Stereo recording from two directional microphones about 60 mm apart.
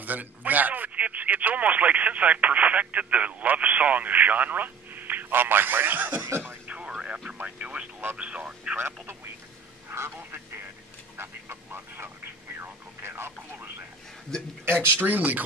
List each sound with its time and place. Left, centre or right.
0.0 s speech: right
6.7 s vehicle: centre
7.3 s speech: centre
8.7 s speech: right
11.1 s a sound: right
12.5 s speech: right
15.0 s speech: right